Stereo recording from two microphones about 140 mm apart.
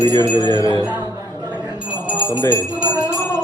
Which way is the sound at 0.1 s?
30° right (ahead or behind).